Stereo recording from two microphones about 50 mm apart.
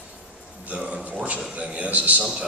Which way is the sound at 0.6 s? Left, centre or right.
Right.